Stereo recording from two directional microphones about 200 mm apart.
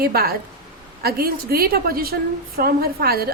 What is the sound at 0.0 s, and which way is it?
A woman's voice, 50° right (ahead or behind).